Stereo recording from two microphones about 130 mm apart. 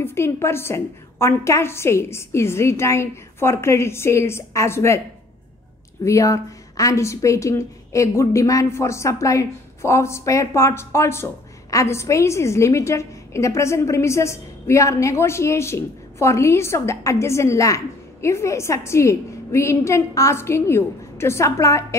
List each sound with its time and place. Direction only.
0.0 s a woman's voice: 20° left (ahead or behind)
6.0 s a woman's voice: 25° left (ahead or behind)